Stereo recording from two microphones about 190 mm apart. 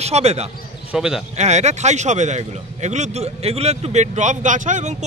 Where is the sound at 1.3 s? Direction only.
35° right (ahead or behind).